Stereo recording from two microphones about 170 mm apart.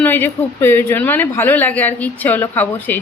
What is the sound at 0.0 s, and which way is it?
Speech, 10° left (ahead or behind).